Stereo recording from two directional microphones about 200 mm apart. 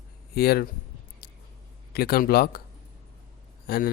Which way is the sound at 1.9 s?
50° left (ahead or behind).